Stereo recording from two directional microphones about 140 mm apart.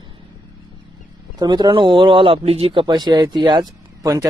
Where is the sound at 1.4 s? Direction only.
30° right (ahead or behind).